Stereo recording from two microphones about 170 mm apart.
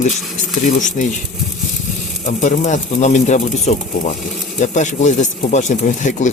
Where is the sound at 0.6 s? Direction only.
45° left (ahead or behind).